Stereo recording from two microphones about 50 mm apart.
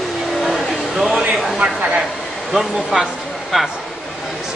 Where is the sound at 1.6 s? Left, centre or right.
Right.